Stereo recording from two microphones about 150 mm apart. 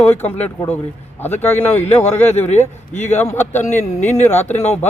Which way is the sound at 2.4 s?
50° left (ahead or behind).